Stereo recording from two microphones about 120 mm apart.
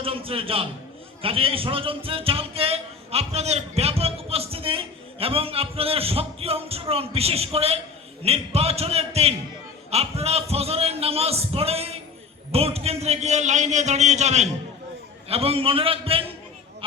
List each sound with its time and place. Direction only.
0.0 s a sound: 50° right (ahead or behind)
1.2 s a man's voice: 50° right (ahead or behind); by 14.5 s 70° right (ahead or behind)
15.3 s speech: 55° right (ahead or behind)